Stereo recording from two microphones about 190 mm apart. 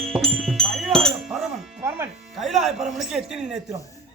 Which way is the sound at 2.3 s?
Centre (ahead or behind).